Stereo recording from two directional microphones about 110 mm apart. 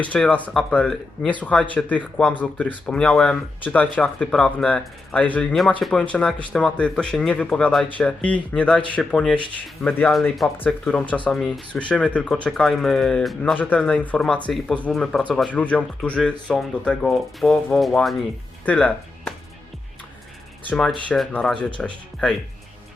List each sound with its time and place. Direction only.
0.0 s speech: 15° left (ahead or behind)
9.8 s speech: 20° left (ahead or behind)
11.3 s speech: centre (ahead or behind)
18.6 s speech: 10° left (ahead or behind)
20.7 s speech: 10° left (ahead or behind)